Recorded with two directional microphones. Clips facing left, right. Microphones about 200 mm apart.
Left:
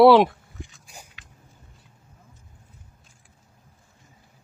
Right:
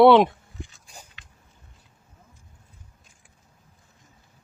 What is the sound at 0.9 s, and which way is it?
Biting, 10° left (ahead or behind).